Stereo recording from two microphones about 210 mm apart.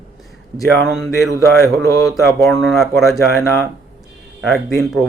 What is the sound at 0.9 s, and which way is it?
Speech, centre (ahead or behind).